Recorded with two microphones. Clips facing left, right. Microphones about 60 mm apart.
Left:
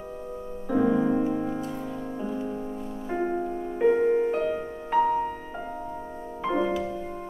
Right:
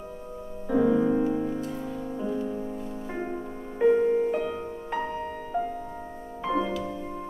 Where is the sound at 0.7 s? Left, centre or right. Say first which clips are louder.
Even; centre.